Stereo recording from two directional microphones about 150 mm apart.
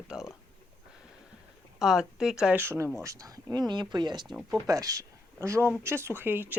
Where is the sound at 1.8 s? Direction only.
5° right (ahead or behind).